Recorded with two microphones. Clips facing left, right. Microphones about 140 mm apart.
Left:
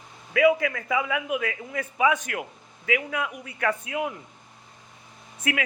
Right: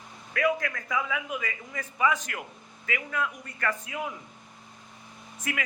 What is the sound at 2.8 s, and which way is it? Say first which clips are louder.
A man's voice: left 4 dB; 80° left.